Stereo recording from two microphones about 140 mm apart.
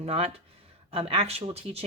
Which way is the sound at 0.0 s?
45° right (ahead or behind).